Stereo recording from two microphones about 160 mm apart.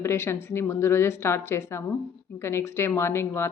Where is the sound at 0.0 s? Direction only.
15° left (ahead or behind).